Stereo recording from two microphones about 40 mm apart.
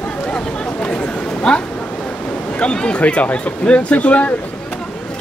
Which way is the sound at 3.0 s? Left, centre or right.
Left.